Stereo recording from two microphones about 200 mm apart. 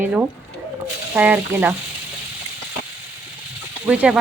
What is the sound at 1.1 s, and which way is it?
Speech, 10° right (ahead or behind).